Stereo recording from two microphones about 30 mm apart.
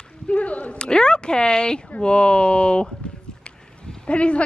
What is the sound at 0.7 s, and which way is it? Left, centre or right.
Speech, left.